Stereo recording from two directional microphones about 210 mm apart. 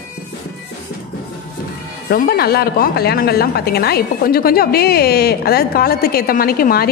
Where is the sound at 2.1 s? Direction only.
45° left (ahead or behind).